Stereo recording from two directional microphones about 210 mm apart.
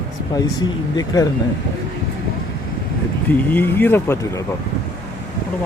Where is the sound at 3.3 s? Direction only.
10° left (ahead or behind).